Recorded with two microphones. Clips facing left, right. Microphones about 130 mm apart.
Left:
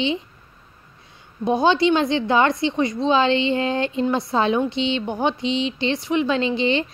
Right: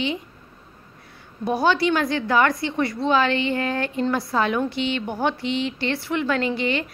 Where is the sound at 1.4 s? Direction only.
20° left (ahead or behind).